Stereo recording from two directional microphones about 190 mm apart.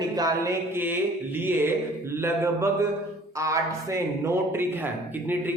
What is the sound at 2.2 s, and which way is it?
A man's voice, 15° right (ahead or behind).